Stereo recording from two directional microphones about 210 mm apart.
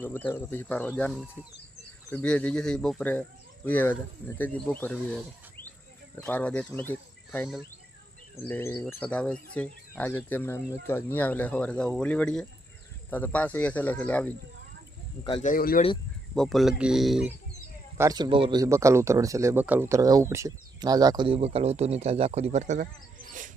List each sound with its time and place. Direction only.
0.0 s speech: 10° left (ahead or behind)
15.2 s speech: 25° left (ahead or behind)
15.4 s speech: 45° left (ahead or behind)
16.3 s speech: centre (ahead or behind)
17.9 s speech: 15° right (ahead or behind); by 23.5 s 40° right (ahead or behind)